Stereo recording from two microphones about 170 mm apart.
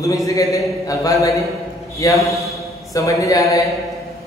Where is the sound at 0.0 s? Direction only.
20° left (ahead or behind).